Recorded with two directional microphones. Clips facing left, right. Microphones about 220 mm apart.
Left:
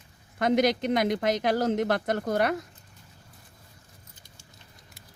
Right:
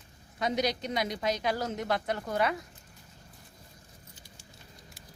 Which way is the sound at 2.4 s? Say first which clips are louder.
Even; 65° left (ahead or behind).